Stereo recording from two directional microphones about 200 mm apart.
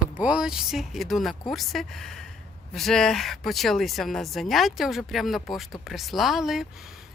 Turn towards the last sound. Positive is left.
turn(degrees=0)  # may be behind; listen again after turning